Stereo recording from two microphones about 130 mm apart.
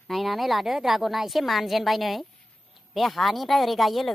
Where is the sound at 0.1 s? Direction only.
Centre (ahead or behind).